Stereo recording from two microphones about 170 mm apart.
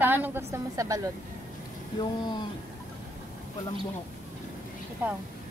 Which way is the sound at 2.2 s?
25° left (ahead or behind).